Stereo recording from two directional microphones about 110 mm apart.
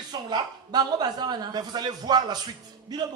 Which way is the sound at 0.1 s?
40° right (ahead or behind).